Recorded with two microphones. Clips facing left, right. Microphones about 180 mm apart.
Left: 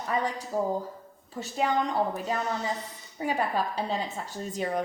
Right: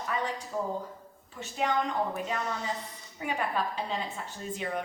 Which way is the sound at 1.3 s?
35° left (ahead or behind).